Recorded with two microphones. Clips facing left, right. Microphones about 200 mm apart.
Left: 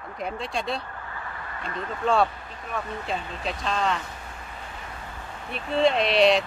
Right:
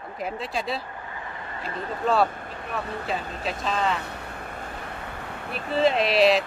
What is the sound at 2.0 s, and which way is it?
Speech, centre (ahead or behind).